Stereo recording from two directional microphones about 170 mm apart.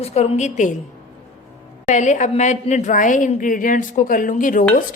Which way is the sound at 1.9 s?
45° left (ahead or behind).